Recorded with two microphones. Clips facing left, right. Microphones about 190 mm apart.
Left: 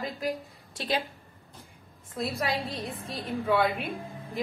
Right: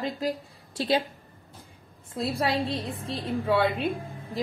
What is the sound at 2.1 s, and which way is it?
A woman's voice, 30° right (ahead or behind).